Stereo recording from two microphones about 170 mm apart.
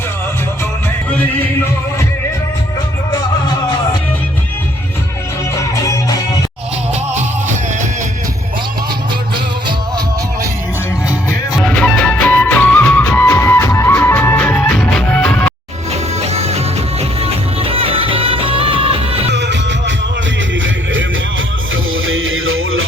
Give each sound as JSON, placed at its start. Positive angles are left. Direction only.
{"t": 7.2, "sound": "music", "side_deg": -45}
{"t": 11.1, "sound": "music", "side_deg": -10}
{"t": 11.6, "sound": "music", "side_deg": 5}
{"t": 15.9, "sound": "music", "side_deg": -35}
{"t": 19.3, "sound": "music", "side_deg": -90}